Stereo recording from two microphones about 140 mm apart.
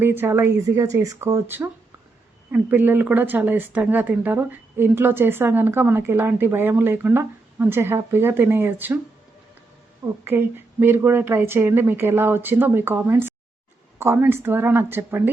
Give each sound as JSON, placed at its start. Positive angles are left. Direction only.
{"t": 0.0, "sound": "speech", "side_deg": -15}
{"t": 10.2, "sound": "speech", "side_deg": -15}